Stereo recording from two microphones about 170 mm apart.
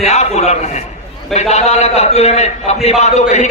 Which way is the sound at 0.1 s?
40° left (ahead or behind).